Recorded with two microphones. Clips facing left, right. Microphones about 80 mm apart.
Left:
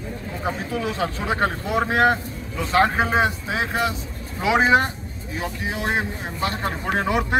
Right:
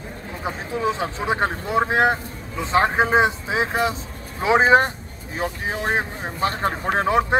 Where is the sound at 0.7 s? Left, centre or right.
Right.